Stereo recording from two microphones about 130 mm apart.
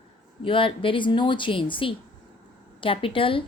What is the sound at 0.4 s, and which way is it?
A woman's voice, 40° left (ahead or behind).